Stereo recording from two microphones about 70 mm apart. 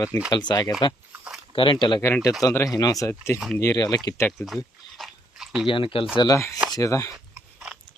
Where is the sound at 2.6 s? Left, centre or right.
Left.